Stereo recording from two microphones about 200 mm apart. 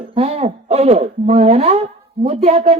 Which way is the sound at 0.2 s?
30° right (ahead or behind).